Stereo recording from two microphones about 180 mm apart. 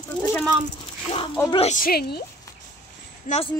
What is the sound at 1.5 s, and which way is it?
Speech, 35° left (ahead or behind).